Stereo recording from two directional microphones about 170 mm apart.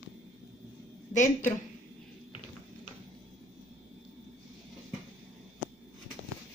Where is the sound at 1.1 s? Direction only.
50° left (ahead or behind).